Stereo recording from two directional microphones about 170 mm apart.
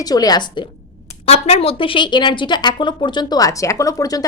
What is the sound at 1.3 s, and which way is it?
A woman's voice, 35° left (ahead or behind).